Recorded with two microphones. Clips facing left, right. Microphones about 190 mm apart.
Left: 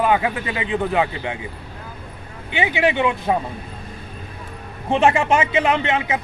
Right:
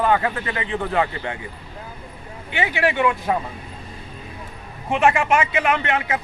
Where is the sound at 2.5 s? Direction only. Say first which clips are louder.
Left 2 dB; 20° left (ahead or behind).